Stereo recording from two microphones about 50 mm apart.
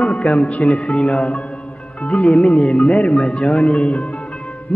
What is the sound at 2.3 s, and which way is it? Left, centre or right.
Mantra, centre.